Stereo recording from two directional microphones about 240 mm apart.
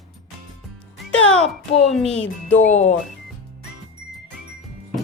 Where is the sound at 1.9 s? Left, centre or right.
Centre.